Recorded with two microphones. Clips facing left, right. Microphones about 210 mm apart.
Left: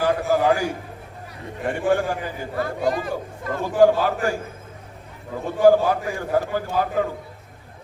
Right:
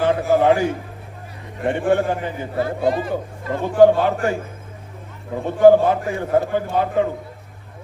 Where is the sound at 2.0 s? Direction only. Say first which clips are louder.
Right 4 dB; 25° right (ahead or behind).